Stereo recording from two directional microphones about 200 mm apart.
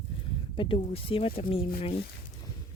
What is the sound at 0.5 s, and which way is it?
Speech, 25° left (ahead or behind).